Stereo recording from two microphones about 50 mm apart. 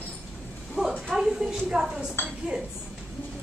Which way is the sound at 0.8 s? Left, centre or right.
Centre.